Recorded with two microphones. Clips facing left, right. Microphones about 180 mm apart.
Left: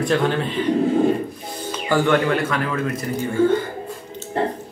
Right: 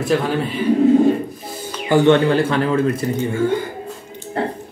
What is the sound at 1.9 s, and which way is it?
Speech, 20° right (ahead or behind).